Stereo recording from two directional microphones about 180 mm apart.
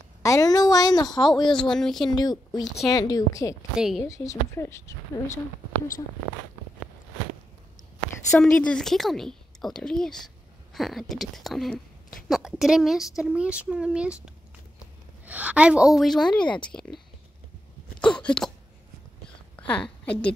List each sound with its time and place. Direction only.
0.2 s speech: 20° left (ahead or behind)
1.5 s a woman's voice: 5° left (ahead or behind)
2.0 s speech: 20° left (ahead or behind)
3.7 s a woman's voice: 5° right (ahead or behind)
4.0 s speech: 15° left (ahead or behind)
8.4 s a woman's voice: 5° left (ahead or behind)
15.2 s a woman's voice: 10° right (ahead or behind)
18.1 s a woman's voice: 5° left (ahead or behind)
19.7 s speech: 5° left (ahead or behind)